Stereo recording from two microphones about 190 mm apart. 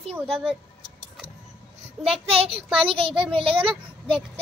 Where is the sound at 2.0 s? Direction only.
30° right (ahead or behind).